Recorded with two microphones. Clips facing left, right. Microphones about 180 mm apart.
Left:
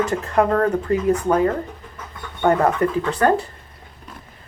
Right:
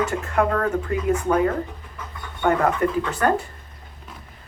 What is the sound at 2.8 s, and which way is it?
Speech, 35° left (ahead or behind).